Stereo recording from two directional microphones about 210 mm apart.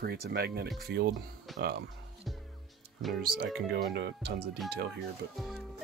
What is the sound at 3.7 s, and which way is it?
Speech, 50° right (ahead or behind).